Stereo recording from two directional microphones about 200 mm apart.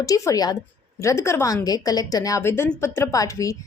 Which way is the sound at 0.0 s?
15° left (ahead or behind).